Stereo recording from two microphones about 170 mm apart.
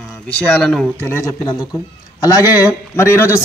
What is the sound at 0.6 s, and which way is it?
Speech, 5° left (ahead or behind).